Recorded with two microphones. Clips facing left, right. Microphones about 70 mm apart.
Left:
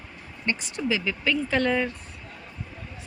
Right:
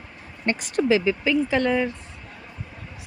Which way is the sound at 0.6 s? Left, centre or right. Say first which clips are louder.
Right 11 dB; right.